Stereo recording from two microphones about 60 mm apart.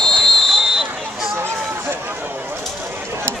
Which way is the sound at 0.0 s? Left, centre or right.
Centre.